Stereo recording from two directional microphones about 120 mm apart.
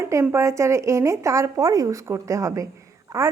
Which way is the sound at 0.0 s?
25° right (ahead or behind).